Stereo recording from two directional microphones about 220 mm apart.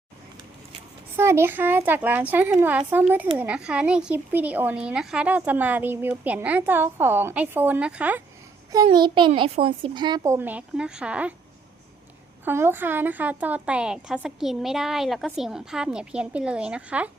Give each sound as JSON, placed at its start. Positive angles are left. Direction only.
{"t": 1.1, "sound": "speech", "side_deg": -10}
{"t": 8.7, "sound": "speech", "side_deg": -15}
{"t": 12.5, "sound": "a woman's voice", "side_deg": -10}